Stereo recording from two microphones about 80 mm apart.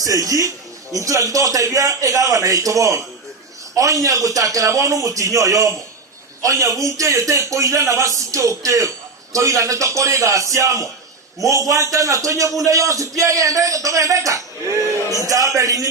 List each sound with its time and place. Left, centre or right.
0.0 s a man's voice: right